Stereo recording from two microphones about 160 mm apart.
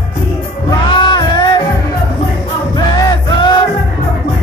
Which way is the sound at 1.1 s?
30° left (ahead or behind).